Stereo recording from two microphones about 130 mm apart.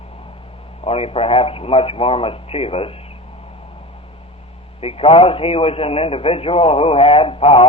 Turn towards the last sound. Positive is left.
turn(degrees=45)  # may be behind; listen again after turning